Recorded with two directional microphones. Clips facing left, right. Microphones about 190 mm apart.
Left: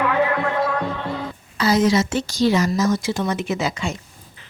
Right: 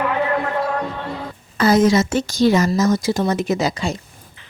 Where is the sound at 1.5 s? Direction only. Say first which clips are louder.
Right 3 dB; 50° right (ahead or behind).